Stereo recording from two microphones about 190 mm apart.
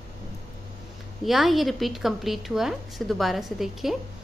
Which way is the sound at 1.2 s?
Centre (ahead or behind).